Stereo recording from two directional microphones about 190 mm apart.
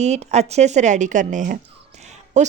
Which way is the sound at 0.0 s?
35° right (ahead or behind).